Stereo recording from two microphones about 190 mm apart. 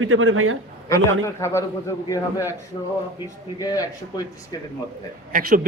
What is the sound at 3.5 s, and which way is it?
Speech, 20° left (ahead or behind).